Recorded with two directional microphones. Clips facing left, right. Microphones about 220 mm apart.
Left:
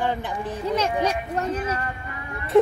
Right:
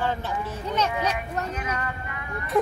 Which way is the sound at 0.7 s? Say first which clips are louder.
Left 2 dB; 30° left (ahead or behind).